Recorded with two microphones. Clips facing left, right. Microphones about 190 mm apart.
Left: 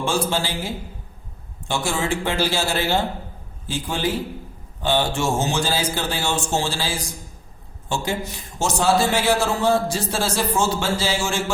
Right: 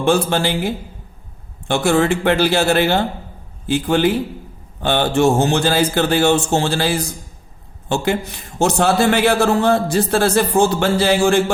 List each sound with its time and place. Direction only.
0.0 s a man's voice: 60° right (ahead or behind)